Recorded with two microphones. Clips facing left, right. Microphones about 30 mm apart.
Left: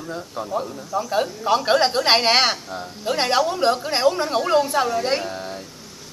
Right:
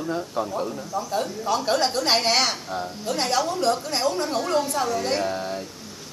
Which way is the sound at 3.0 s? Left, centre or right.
Left.